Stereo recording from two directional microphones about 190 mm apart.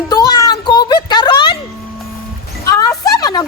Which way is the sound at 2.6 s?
15° left (ahead or behind).